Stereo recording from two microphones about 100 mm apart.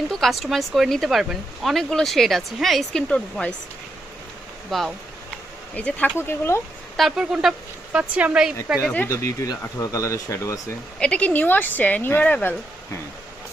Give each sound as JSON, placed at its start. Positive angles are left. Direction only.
{"t": 0.1, "sound": "speech", "side_deg": 0}
{"t": 4.7, "sound": "speech", "side_deg": 0}
{"t": 5.7, "sound": "speech", "side_deg": 15}
{"t": 6.9, "sound": "speech", "side_deg": 0}
{"t": 7.9, "sound": "speech", "side_deg": -15}
{"t": 9.0, "sound": "speech", "side_deg": 30}
{"t": 11.0, "sound": "speech", "side_deg": 10}